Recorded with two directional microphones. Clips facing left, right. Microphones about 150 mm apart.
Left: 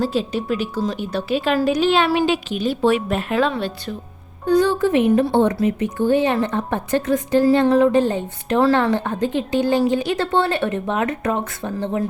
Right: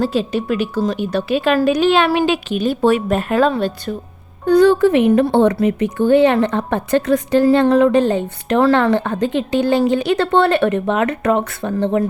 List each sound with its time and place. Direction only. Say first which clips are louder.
0.0 s a woman's voice: right 3 dB; 65° right (ahead or behind); by 3.9 s 45° right (ahead or behind)
4.4 s speech: right 5 dB; 65° right (ahead or behind)